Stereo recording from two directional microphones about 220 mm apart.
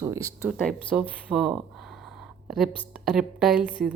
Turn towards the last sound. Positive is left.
turn(degrees=-5)  # may be behind; listen again after turning